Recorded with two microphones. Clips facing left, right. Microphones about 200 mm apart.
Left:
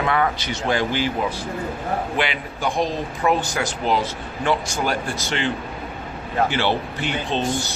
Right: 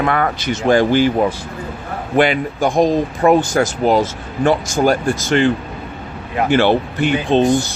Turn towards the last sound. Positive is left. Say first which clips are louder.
# right 9 dB
turn(degrees=-50)  # may be behind; listen again after turning